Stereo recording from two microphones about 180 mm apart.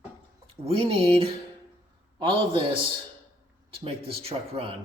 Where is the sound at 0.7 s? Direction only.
30° right (ahead or behind).